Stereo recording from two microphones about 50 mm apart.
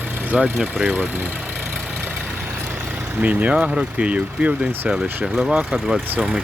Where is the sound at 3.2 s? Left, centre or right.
Right.